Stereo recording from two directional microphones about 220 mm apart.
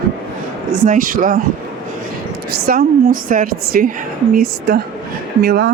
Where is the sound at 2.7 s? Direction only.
40° right (ahead or behind).